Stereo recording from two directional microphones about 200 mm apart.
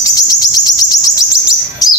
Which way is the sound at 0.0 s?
15° left (ahead or behind).